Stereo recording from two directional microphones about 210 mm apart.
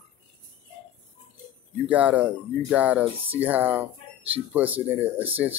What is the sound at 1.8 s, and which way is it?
Speech, 5° right (ahead or behind).